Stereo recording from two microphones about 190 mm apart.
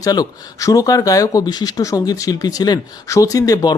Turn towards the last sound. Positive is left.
turn(degrees=20)  # may be behind; listen again after turning